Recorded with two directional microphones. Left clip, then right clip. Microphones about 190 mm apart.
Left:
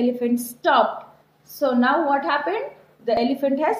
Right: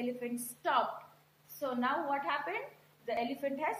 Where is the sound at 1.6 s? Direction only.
50° left (ahead or behind).